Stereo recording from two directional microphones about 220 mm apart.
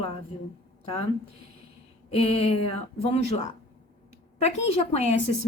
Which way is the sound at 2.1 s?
25° left (ahead or behind).